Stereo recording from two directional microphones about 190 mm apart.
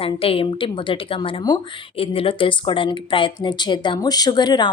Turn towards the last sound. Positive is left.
turn(degrees=20)  # may be behind; listen again after turning